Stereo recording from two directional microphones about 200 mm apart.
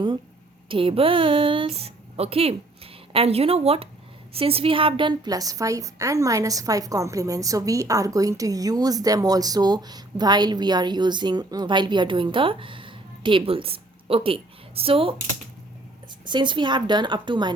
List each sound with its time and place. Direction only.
0.7 s a woman's voice: 25° right (ahead or behind)
16.2 s a woman's voice: 25° right (ahead or behind)